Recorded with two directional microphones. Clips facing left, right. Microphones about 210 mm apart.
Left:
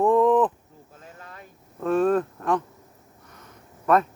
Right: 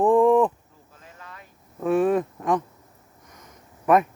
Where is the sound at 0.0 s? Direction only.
15° right (ahead or behind).